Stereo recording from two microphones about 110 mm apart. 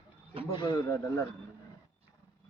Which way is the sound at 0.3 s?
55° right (ahead or behind).